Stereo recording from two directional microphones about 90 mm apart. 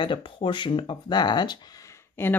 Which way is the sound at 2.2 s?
25° left (ahead or behind).